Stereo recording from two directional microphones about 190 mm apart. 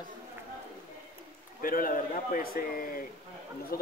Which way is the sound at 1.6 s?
50° left (ahead or behind).